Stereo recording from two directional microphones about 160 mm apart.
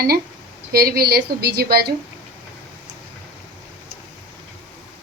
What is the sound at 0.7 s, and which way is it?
A woman's voice, 75° right (ahead or behind).